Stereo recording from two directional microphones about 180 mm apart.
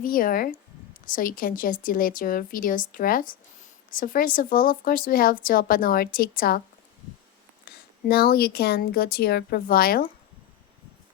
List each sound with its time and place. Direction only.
0.0 s speech: 50° left (ahead or behind)
8.0 s speech: 55° left (ahead or behind)